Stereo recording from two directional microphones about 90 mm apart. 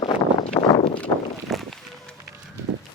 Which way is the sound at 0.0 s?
90° left.